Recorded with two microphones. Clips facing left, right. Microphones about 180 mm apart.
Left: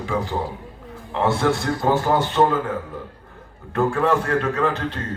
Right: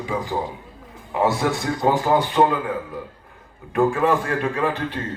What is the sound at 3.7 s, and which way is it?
Speech, 15° right (ahead or behind).